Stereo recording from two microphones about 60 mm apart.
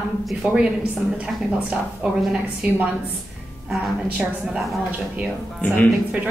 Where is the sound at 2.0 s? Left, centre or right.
Centre.